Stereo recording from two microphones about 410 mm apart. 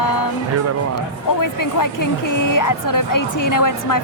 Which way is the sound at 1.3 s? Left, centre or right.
Left.